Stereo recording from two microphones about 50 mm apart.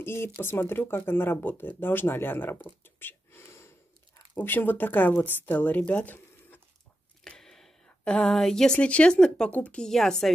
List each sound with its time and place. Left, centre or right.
0.0 s speech: left
2.6 s whispering: left
4.4 s speech: left
7.2 s a sound: centre
8.2 s speech: centre
8.7 s speech: left; by 10.3 s centre